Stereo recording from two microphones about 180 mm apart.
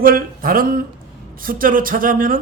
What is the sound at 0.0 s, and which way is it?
Speech, 55° right (ahead or behind).